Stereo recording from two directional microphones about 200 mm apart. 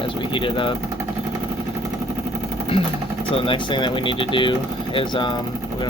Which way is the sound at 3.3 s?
25° left (ahead or behind).